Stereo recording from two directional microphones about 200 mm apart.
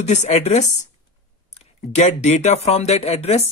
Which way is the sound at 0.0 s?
35° left (ahead or behind).